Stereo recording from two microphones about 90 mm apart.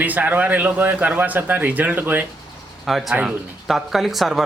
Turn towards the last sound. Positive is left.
turn(degrees=0)  # may be behind; listen again after turning